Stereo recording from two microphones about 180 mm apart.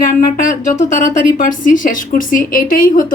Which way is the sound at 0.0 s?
45° left (ahead or behind).